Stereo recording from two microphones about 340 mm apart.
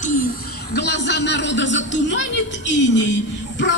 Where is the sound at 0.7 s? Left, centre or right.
Left.